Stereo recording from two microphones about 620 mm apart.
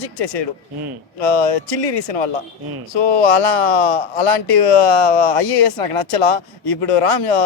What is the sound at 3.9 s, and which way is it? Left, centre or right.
Speech, left.